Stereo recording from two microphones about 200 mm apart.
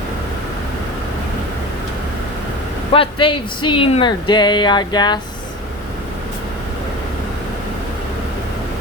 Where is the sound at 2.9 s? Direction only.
25° left (ahead or behind).